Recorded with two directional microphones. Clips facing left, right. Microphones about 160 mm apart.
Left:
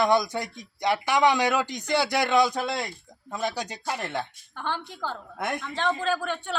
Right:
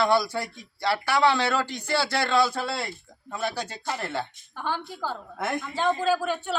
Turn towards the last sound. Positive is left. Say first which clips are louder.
# right 3 dB
turn(degrees=-10)  # may be behind; listen again after turning